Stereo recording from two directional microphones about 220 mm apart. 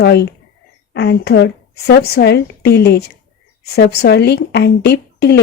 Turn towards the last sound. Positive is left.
turn(degrees=50)  # may be behind; listen again after turning